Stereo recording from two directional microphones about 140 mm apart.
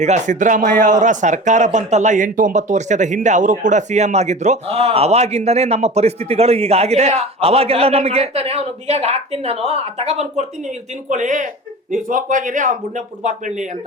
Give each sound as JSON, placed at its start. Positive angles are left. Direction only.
{"t": 0.0, "sound": "speech", "side_deg": -60}
{"t": 11.1, "sound": "a man's voice", "side_deg": -65}